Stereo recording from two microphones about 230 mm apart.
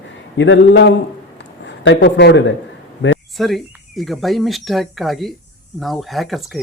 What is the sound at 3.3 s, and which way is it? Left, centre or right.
Speech, centre.